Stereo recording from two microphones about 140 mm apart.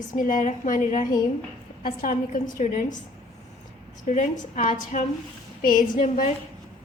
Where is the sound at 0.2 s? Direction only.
70° left (ahead or behind).